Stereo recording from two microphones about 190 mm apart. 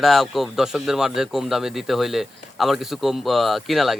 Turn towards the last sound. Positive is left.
turn(degrees=0)  # may be behind; listen again after turning